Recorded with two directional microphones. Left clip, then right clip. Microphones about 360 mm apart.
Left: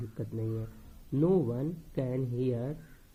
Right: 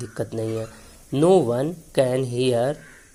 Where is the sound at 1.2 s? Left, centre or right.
Centre.